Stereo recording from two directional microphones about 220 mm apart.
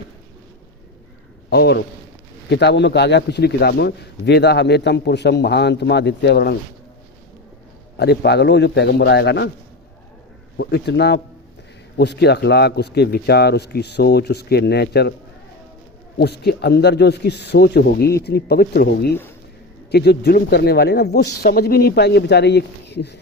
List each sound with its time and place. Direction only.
1.5 s a man's voice: 50° left (ahead or behind)
7.9 s a man's voice: 50° left (ahead or behind)
10.6 s a man's voice: 50° left (ahead or behind)
16.1 s a man's voice: 50° left (ahead or behind)